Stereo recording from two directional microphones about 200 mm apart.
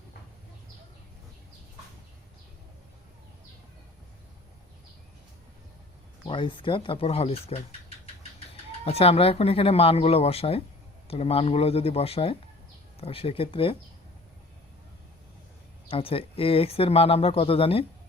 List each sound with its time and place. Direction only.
6.2 s speech: 25° left (ahead or behind)
8.8 s speech: 30° left (ahead or behind)
15.9 s speech: 30° left (ahead or behind)